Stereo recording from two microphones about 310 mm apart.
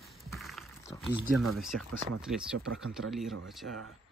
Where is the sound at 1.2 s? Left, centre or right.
Right.